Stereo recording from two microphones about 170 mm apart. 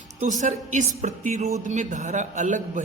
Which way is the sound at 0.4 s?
45° right (ahead or behind).